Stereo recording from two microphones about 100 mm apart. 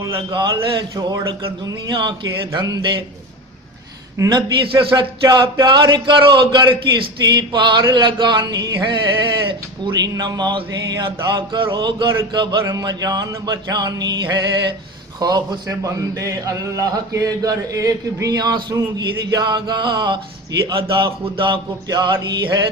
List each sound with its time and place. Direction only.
0.0 s speech: 45° right (ahead or behind)
4.3 s speech: 50° right (ahead or behind)
9.8 s a man's voice: 45° right (ahead or behind)